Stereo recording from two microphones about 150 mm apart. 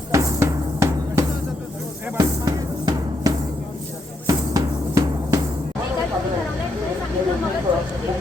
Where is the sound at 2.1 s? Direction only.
25° right (ahead or behind).